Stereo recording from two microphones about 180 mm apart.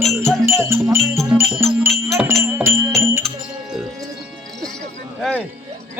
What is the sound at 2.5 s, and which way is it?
Music, 10° right (ahead or behind).